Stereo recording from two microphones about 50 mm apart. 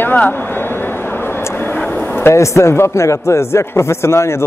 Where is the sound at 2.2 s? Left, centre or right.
Left.